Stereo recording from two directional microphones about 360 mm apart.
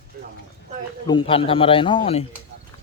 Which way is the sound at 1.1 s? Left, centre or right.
Centre.